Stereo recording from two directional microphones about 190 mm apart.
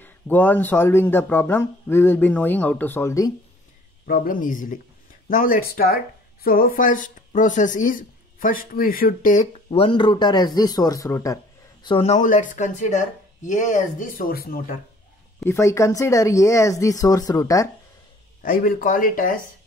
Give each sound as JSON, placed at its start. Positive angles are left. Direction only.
{"t": 0.0, "sound": "speech", "side_deg": 10}
{"t": 4.1, "sound": "speech", "side_deg": 45}
{"t": 11.8, "sound": "speech", "side_deg": 30}
{"t": 15.4, "sound": "speech", "side_deg": 15}
{"t": 18.4, "sound": "speech", "side_deg": 45}